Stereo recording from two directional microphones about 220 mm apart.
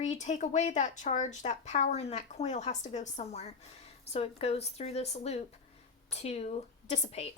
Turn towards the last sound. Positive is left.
turn(degrees=30)  # may be behind; listen again after turning